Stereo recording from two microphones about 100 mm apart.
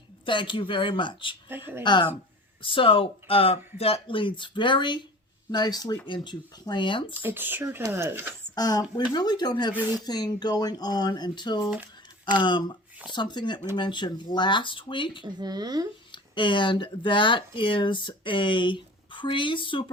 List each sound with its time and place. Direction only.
0.3 s speech: 55° left (ahead or behind)
2.6 s speech: 60° left (ahead or behind)
7.1 s speech: 20° right (ahead or behind)
8.5 s speech: 40° left (ahead or behind)
15.2 s speech: 45° right (ahead or behind)
16.1 s speech: 55° left (ahead or behind)